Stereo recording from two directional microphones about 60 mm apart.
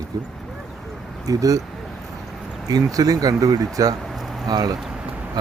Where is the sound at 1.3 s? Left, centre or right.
Right.